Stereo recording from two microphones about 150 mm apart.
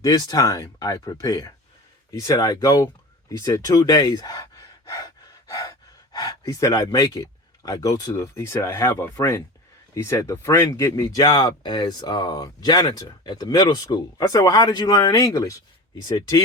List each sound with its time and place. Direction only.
0.0 s speech: 25° left (ahead or behind)